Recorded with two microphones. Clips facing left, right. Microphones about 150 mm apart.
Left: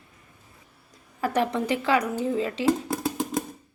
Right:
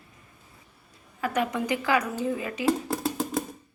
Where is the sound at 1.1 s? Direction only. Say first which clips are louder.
Left 2 dB; 35° left (ahead or behind).